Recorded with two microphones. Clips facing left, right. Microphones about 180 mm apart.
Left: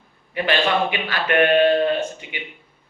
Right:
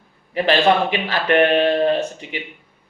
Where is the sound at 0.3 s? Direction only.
35° right (ahead or behind).